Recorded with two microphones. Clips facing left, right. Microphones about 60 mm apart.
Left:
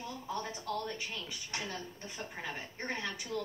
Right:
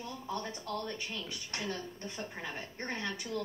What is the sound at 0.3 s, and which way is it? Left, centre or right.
Speech, centre.